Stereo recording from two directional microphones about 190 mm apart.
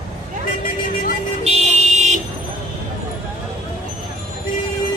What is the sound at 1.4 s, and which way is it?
Vehicle, 35° right (ahead or behind).